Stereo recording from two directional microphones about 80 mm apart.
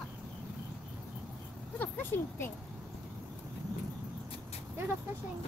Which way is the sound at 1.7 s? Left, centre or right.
Left.